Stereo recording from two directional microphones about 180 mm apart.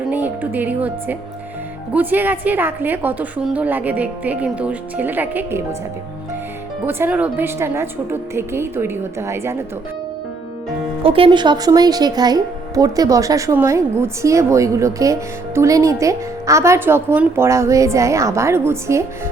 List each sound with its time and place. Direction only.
0.1 s speech: 10° right (ahead or behind)
6.8 s speech: 10° right (ahead or behind)
11.0 s speech: 30° right (ahead or behind); by 19.0 s 15° right (ahead or behind)